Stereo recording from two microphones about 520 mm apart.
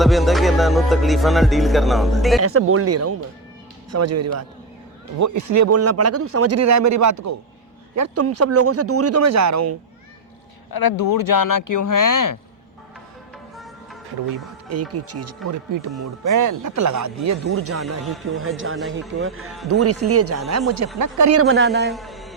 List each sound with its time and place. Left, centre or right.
0.0 s music: centre
2.4 s a man's voice: right
10.7 s speech: left
14.9 s a man's voice: right
18.0 s music: centre
18.3 s speech: right
21.8 s music: centre